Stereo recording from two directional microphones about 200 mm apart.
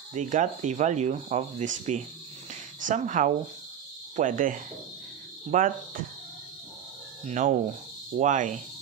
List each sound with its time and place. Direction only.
0.1 s speech: 35° right (ahead or behind)
7.2 s speech: 40° right (ahead or behind)